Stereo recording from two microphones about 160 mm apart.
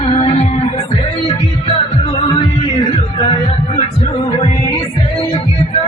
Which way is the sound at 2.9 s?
35° left (ahead or behind).